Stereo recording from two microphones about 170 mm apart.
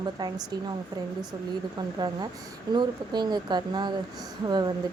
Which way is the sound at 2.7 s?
25° right (ahead or behind).